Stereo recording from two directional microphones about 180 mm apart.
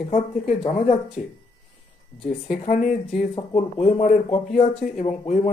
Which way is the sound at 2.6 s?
40° left (ahead or behind).